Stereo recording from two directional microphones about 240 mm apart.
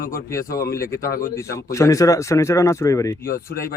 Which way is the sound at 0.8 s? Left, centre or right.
Centre.